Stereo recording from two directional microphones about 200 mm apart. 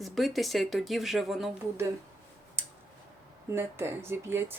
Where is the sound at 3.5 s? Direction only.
10° right (ahead or behind).